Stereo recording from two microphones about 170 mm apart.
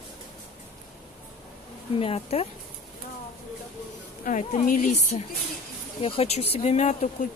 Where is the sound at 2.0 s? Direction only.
35° left (ahead or behind).